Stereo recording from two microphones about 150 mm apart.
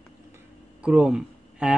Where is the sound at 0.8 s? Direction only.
5° right (ahead or behind).